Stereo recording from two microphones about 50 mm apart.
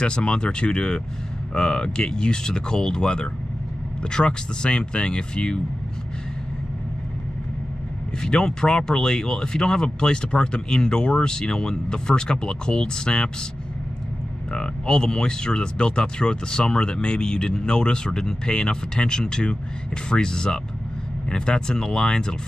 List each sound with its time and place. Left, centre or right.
0.0 s speech: centre
8.2 s speech: centre
14.5 s speech: centre